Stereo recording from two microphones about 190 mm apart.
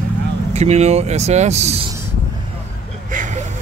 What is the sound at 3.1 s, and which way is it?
Vehicle, 40° right (ahead or behind).